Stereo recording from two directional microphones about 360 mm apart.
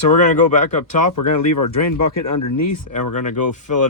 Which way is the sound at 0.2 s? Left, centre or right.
Left.